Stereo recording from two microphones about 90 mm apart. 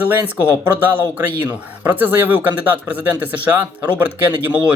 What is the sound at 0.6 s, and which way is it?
Speech, 25° right (ahead or behind).